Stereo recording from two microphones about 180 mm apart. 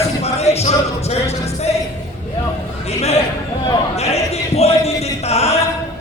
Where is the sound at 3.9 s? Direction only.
35° left (ahead or behind).